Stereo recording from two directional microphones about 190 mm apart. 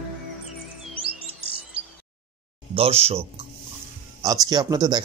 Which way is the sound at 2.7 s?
30° right (ahead or behind).